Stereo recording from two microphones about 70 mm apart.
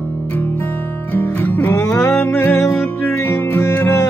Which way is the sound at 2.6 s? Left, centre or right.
Left.